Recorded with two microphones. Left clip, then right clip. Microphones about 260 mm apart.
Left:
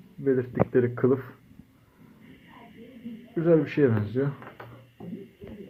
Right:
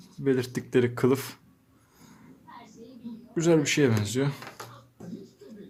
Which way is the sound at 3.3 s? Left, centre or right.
Right.